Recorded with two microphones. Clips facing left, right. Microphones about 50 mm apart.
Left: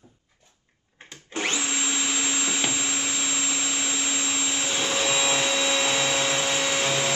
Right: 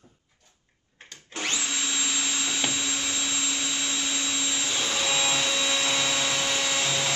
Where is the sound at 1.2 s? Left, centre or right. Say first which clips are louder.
Left 3 dB; centre.